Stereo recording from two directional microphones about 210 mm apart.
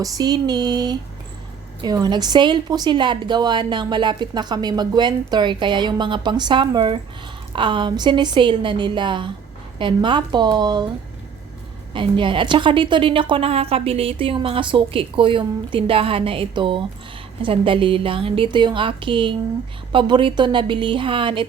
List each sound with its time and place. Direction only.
0.0 s a woman's voice: 15° right (ahead or behind)
11.9 s a woman's voice: 25° right (ahead or behind)